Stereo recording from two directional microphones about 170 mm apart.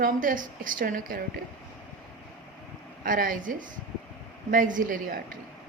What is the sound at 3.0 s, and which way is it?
A woman's voice, 55° right (ahead or behind).